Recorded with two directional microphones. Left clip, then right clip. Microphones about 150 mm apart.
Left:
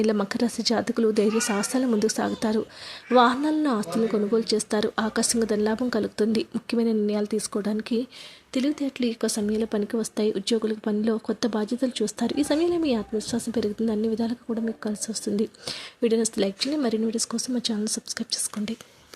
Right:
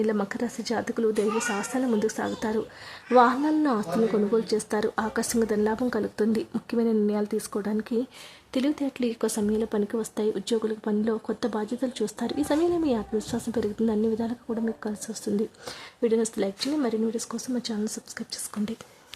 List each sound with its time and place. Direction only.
0.0 s a woman's voice: 20° left (ahead or behind)